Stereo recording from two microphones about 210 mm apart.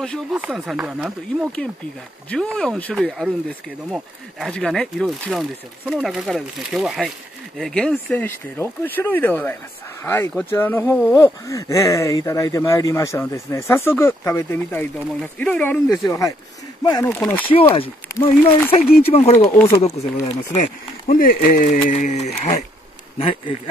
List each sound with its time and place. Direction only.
0.0 s speech: 5° left (ahead or behind)
17.5 s speech: 25° left (ahead or behind)
21.1 s speech: 40° left (ahead or behind)